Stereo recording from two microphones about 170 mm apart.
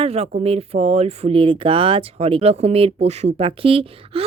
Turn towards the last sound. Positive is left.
turn(degrees=-35)  # may be behind; listen again after turning